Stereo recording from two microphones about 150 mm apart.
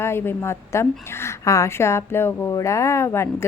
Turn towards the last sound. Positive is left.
turn(degrees=15)  # may be behind; listen again after turning